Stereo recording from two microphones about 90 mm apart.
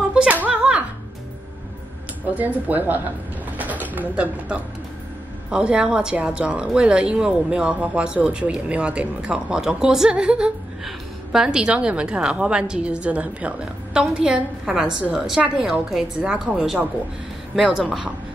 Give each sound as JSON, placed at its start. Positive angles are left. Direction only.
{"t": 0.3, "sound": "music", "side_deg": -15}
{"t": 2.3, "sound": "a woman's voice", "side_deg": -20}